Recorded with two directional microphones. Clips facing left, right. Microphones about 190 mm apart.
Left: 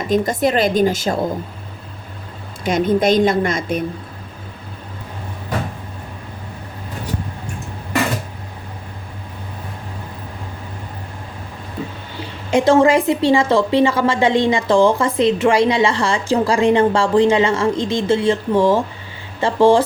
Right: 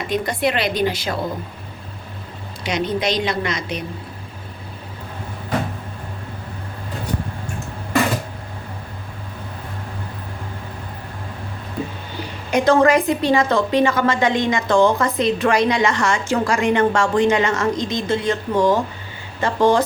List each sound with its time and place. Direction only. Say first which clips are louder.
0.0 s a woman's voice: left 4 dB; 45° left (ahead or behind)
2.6 s a woman's voice: left 6 dB; 50° left (ahead or behind)
12.5 s a woman's voice: left 2 dB; 25° left (ahead or behind)